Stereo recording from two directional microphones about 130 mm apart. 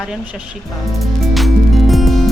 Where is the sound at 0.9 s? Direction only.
Centre (ahead or behind).